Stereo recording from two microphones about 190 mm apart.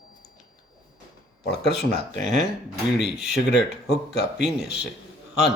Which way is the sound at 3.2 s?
60° left (ahead or behind).